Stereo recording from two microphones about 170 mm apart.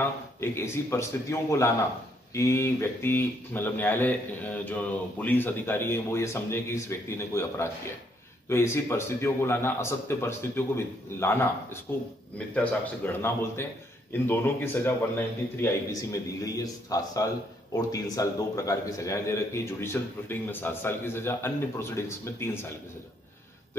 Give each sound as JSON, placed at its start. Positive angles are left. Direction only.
{"t": 0.4, "sound": "a man's voice", "side_deg": 15}